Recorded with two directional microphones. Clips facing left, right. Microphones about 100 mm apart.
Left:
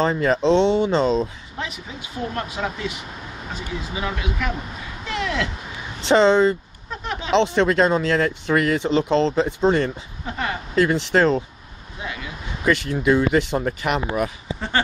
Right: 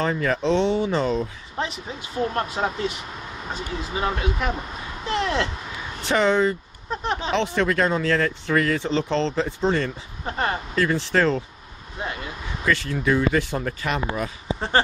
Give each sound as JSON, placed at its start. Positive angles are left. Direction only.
{"t": 0.0, "sound": "speech", "side_deg": 20}
{"t": 1.6, "sound": "speech", "side_deg": -35}
{"t": 3.9, "sound": "speech", "side_deg": -40}
{"t": 5.0, "sound": "a sound", "side_deg": -30}
{"t": 6.0, "sound": "speech", "side_deg": 25}
{"t": 6.9, "sound": "a sound", "side_deg": -30}
{"t": 7.3, "sound": "speech", "side_deg": 20}
{"t": 10.2, "sound": "speech", "side_deg": -40}
{"t": 10.8, "sound": "speech", "side_deg": 20}
{"t": 12.0, "sound": "speech", "side_deg": -40}
{"t": 12.6, "sound": "speech", "side_deg": 20}
{"t": 14.5, "sound": "speech", "side_deg": -35}